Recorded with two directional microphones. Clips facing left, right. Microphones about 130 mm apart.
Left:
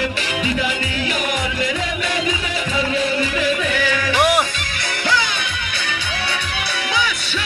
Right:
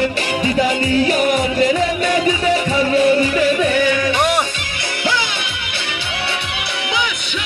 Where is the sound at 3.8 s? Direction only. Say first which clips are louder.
Right 3 dB; 25° right (ahead or behind).